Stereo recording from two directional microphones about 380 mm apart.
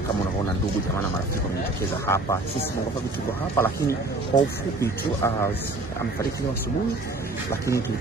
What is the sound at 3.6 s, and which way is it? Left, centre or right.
Speech, centre.